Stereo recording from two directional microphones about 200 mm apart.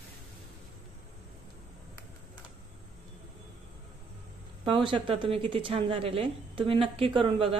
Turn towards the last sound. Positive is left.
turn(degrees=-25)  # may be behind; listen again after turning